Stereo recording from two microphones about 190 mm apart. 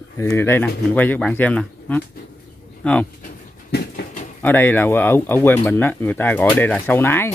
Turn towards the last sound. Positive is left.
turn(degrees=10)  # may be behind; listen again after turning